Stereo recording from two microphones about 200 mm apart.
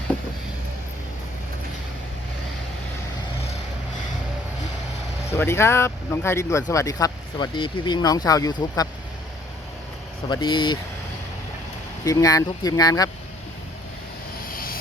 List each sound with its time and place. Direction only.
5.4 s speech: 10° left (ahead or behind)
10.2 s speech: 20° left (ahead or behind)
12.0 s speech: 15° left (ahead or behind)
14.5 s vehicle: 45° left (ahead or behind)